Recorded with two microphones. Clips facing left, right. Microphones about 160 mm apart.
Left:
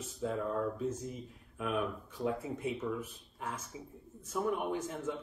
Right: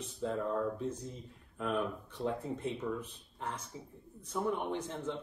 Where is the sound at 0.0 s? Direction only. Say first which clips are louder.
Even; 5° left (ahead or behind).